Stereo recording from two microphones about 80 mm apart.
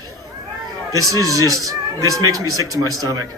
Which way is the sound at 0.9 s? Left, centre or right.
Right.